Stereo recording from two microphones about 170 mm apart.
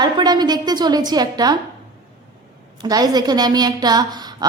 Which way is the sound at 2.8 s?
25° right (ahead or behind).